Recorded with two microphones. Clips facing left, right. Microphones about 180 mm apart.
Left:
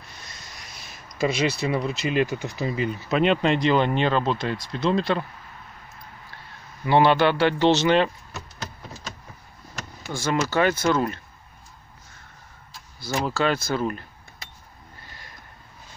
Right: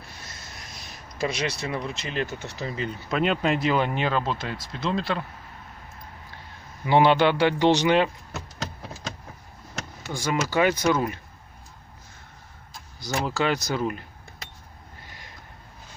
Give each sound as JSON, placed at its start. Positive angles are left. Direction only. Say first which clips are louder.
{"t": 0.7, "sound": "speech", "louder": "left 3 dB", "side_deg": 0}
{"t": 6.9, "sound": "speech", "louder": "even", "side_deg": -15}
{"t": 10.1, "sound": "speech", "louder": "left 1 dB", "side_deg": -15}
{"t": 13.0, "sound": "speech", "louder": "left 2 dB", "side_deg": -15}
{"t": 15.0, "sound": "a sound", "louder": "even", "side_deg": -15}